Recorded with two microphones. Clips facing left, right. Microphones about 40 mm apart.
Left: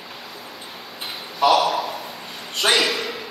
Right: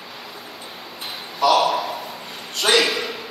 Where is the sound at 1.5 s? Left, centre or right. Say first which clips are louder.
Right 1 dB; centre.